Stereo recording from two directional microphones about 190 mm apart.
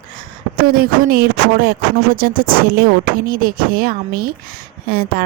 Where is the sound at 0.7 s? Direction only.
50° right (ahead or behind).